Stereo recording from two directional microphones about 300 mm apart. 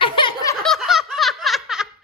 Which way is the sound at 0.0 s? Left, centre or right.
Centre.